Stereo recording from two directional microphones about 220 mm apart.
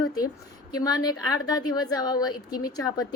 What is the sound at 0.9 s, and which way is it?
A woman's voice, 15° left (ahead or behind).